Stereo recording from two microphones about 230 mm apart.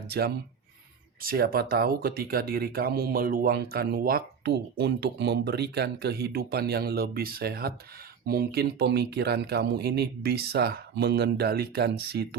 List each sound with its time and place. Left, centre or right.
0.1 s speech: right